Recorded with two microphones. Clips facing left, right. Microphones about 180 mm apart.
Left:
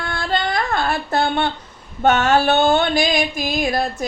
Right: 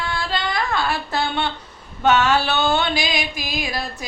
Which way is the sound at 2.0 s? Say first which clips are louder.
Left 2 dB; 50° left (ahead or behind).